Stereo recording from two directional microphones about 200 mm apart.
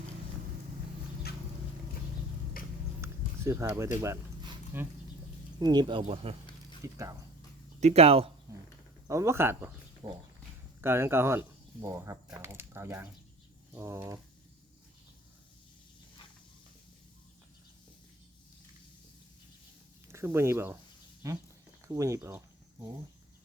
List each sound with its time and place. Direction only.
3.0 s a sound: 15° right (ahead or behind)
3.9 s speech: 15° right (ahead or behind)
5.5 s speech: 20° right (ahead or behind)
6.8 s speech: 15° right (ahead or behind)
7.8 s speech: 35° right (ahead or behind)
9.0 s speech: 15° right (ahead or behind)
20.1 s speech: 10° right (ahead or behind)